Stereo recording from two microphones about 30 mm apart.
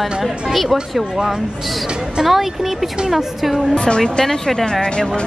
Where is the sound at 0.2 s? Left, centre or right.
Centre.